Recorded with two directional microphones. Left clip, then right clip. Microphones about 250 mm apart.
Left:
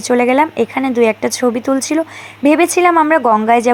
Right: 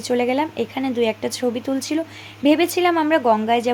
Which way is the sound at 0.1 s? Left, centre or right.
Centre.